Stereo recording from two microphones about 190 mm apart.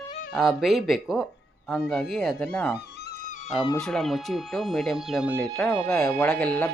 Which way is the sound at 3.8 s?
Centre (ahead or behind).